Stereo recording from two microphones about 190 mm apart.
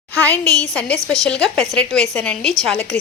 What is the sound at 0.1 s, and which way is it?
Speech, 5° left (ahead or behind).